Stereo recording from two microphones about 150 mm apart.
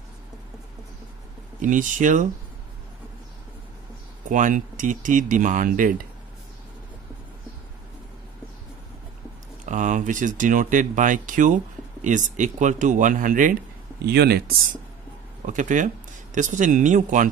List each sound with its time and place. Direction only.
1.6 s speech: 60° right (ahead or behind)
4.3 s speech: 60° right (ahead or behind)
9.7 s speech: 55° right (ahead or behind)
14.0 s speech: 90° right
15.4 s speech: 55° right (ahead or behind)